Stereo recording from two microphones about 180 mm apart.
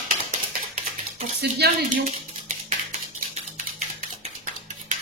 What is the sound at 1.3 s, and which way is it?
Speech, 60° right (ahead or behind).